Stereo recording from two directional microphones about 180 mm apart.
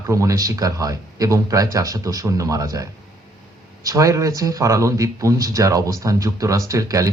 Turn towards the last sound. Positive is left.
turn(degrees=-20)  # may be behind; listen again after turning